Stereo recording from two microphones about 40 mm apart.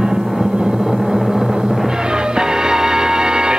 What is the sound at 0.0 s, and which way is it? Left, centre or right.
Music, centre.